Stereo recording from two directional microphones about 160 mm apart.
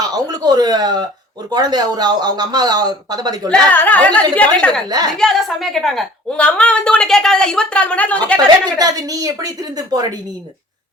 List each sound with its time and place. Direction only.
0.0 s speech: 25° right (ahead or behind)
3.7 s a woman's voice: 10° left (ahead or behind)
8.8 s speech: 20° right (ahead or behind)